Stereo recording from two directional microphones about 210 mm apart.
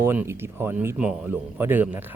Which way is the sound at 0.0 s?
10° right (ahead or behind).